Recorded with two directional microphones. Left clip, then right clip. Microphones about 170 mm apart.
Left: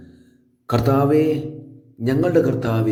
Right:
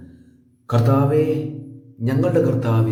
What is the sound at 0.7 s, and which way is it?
Speech, 30° left (ahead or behind).